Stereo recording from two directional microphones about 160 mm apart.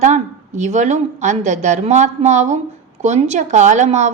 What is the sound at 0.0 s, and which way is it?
A woman's voice, 50° right (ahead or behind).